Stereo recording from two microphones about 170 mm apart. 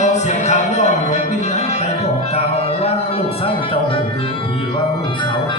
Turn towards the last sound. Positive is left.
turn(degrees=35)  # may be behind; listen again after turning